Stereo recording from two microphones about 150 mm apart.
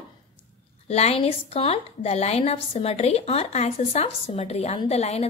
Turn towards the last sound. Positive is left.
turn(degrees=45)  # may be behind; listen again after turning